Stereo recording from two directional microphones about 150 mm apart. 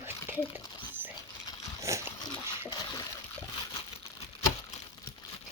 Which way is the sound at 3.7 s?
40° left (ahead or behind).